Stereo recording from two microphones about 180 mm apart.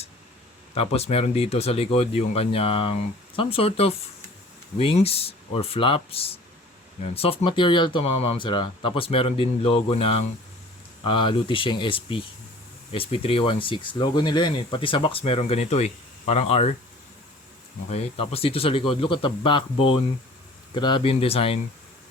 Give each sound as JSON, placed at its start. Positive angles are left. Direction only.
{"t": 0.7, "sound": "speech", "side_deg": 35}
{"t": 17.8, "sound": "speech", "side_deg": 35}